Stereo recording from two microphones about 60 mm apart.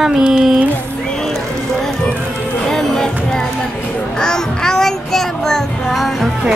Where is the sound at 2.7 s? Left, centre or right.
Centre.